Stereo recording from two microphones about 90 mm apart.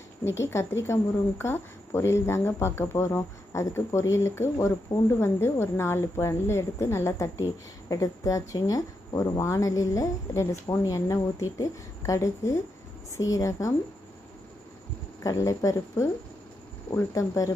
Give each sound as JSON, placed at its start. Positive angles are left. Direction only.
{"t": 0.3, "sound": "speech", "side_deg": 30}
{"t": 7.9, "sound": "a woman's voice", "side_deg": 40}
{"t": 15.2, "sound": "a woman's voice", "side_deg": 35}
{"t": 17.1, "sound": "a woman's voice", "side_deg": 40}